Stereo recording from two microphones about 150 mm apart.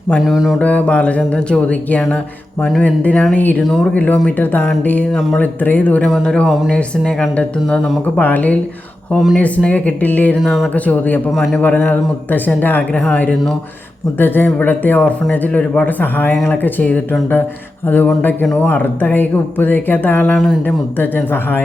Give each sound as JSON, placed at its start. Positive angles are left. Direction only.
{"t": 0.2, "sound": "speech", "side_deg": -5}
{"t": 0.6, "sound": "speech", "side_deg": 10}
{"t": 21.0, "sound": "speech", "side_deg": 10}